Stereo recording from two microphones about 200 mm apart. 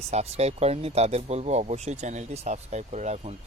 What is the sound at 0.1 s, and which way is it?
Speech, 35° right (ahead or behind).